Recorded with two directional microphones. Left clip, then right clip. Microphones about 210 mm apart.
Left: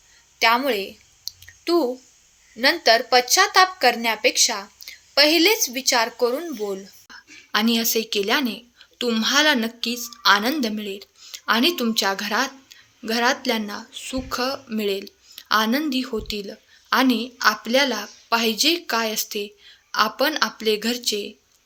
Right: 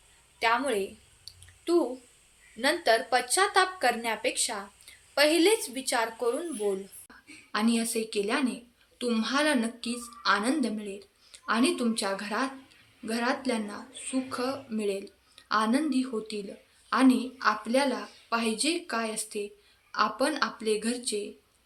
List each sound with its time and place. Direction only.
0.3 s a woman's voice: 40° left (ahead or behind)